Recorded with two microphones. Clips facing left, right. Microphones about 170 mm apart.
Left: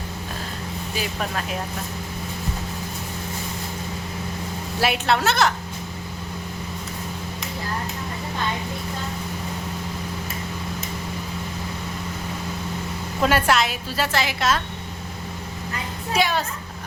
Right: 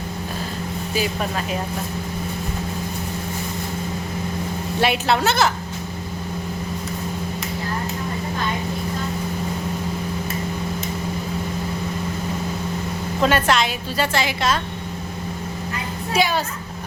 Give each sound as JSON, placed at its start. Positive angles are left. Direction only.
{"t": 0.9, "sound": "a woman's voice", "side_deg": 0}
{"t": 4.8, "sound": "a woman's voice", "side_deg": 0}
{"t": 13.2, "sound": "a woman's voice", "side_deg": 5}
{"t": 16.1, "sound": "a woman's voice", "side_deg": 0}